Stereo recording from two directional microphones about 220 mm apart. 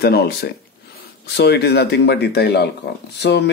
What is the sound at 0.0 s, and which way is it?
Speech, 45° left (ahead or behind).